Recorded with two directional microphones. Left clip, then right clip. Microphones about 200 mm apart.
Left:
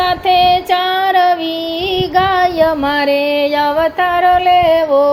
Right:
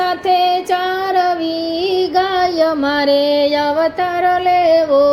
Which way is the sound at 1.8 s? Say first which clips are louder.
Left 2 dB; centre (ahead or behind).